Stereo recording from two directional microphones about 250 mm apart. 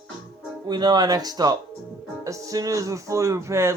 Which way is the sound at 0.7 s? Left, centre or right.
Centre.